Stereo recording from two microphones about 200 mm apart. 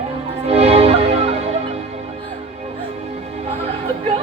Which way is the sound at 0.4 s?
30° right (ahead or behind).